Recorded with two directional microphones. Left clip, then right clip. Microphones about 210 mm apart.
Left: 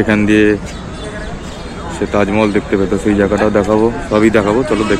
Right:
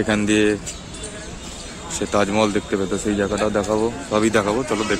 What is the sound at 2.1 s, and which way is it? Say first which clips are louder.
Speech: left 5 dB; 20° right (ahead or behind).